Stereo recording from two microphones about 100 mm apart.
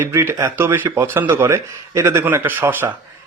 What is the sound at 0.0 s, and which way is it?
Speech, 25° right (ahead or behind).